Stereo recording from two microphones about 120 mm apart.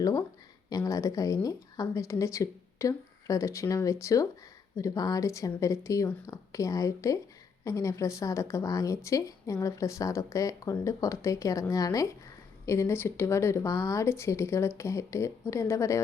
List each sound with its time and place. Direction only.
0.0 s speech: 30° left (ahead or behind)